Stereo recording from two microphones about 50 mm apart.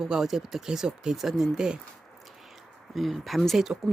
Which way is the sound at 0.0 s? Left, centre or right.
Centre.